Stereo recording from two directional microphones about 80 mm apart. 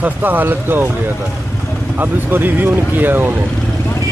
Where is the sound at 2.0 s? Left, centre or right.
Right.